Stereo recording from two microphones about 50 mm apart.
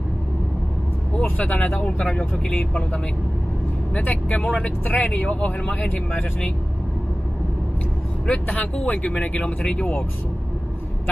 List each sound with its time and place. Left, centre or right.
1.1 s speech: left
2.0 s speech: centre
4.8 s speech: left
8.3 s speech: left